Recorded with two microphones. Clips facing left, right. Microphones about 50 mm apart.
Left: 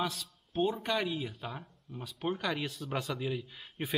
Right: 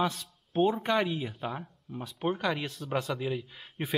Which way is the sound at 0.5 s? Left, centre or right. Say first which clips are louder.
Right 5 dB; centre.